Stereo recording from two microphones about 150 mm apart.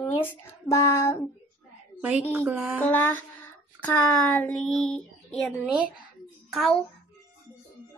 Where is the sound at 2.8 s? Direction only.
10° left (ahead or behind).